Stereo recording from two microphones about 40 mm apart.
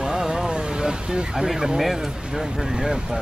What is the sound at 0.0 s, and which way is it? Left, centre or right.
Vehicle, centre.